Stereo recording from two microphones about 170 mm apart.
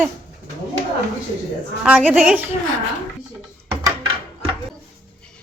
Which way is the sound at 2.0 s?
10° right (ahead or behind).